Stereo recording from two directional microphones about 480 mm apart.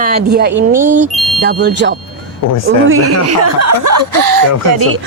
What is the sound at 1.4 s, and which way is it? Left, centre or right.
A woman's voice, right.